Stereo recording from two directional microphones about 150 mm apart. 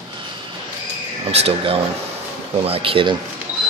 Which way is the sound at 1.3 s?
40° right (ahead or behind).